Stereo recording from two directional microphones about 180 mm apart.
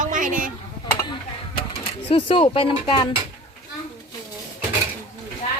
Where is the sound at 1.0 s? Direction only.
30° left (ahead or behind).